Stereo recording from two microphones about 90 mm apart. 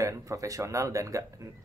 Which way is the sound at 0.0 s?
35° right (ahead or behind).